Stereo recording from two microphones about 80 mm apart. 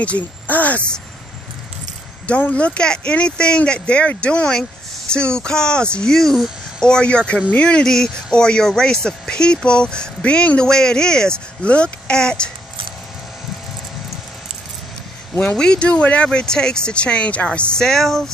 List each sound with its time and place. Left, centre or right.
0.0 s speech: centre
2.2 s speech: centre
15.5 s speech: centre